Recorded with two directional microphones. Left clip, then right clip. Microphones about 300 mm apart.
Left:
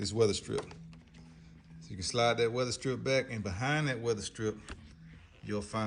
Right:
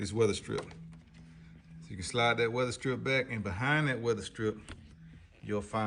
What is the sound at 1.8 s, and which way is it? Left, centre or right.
Speech, left.